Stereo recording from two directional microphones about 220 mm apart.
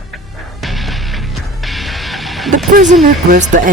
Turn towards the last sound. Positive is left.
turn(degrees=-35)  # may be behind; listen again after turning